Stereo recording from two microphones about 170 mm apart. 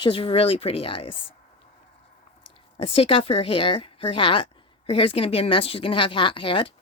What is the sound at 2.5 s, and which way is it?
A woman's voice, 35° left (ahead or behind).